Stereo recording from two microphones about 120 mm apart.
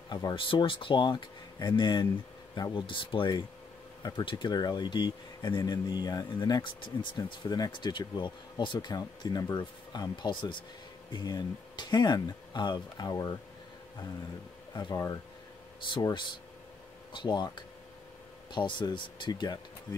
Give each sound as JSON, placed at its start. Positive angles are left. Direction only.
{"t": 0.1, "sound": "speech", "side_deg": 35}
{"t": 14.7, "sound": "speech", "side_deg": 35}